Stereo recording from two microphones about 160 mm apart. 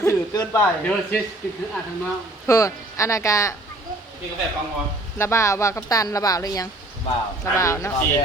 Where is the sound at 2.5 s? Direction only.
20° left (ahead or behind).